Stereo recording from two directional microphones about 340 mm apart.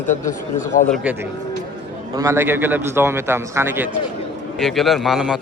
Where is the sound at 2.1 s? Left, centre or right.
Centre.